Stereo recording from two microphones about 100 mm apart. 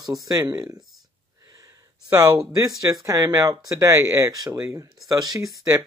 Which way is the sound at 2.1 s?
35° right (ahead or behind).